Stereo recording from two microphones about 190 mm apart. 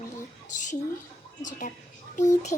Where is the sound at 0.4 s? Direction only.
40° left (ahead or behind).